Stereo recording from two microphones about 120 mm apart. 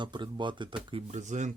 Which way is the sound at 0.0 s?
40° right (ahead or behind).